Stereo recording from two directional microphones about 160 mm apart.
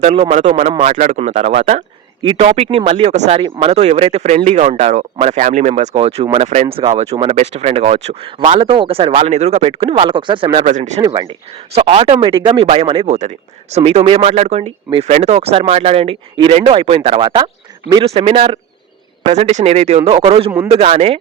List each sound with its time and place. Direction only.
0.0 s speech: 45° right (ahead or behind)
2.2 s speech: 35° right (ahead or behind)
10.7 s speech: 50° right (ahead or behind)
11.0 s speech: 30° right (ahead or behind)